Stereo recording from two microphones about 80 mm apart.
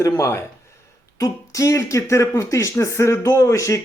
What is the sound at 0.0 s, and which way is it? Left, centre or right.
Speech, left.